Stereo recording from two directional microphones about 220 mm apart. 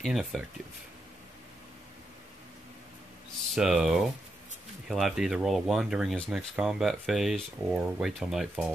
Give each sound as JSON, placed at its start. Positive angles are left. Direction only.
{"t": 0.0, "sound": "speech", "side_deg": 0}
{"t": 3.5, "sound": "speech", "side_deg": 0}